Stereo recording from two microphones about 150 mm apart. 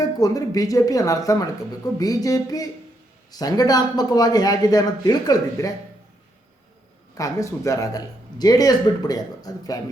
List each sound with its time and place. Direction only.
0.0 s speech: 25° left (ahead or behind)
7.2 s speech: 20° left (ahead or behind)